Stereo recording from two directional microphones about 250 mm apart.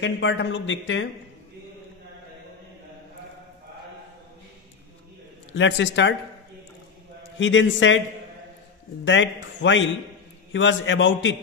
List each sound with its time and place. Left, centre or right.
0.0 s speech: left
5.5 s speech: left
7.3 s speech: left
9.0 s speech: left